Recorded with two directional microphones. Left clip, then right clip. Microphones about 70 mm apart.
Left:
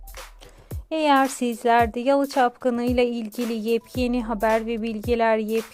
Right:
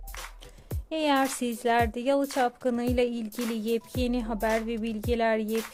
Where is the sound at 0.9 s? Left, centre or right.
Left.